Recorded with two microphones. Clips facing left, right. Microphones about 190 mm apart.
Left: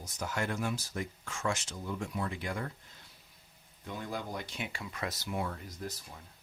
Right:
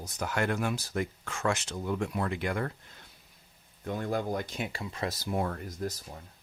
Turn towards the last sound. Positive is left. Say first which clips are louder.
# right 5 dB
turn(degrees=-45)  # may be behind; listen again after turning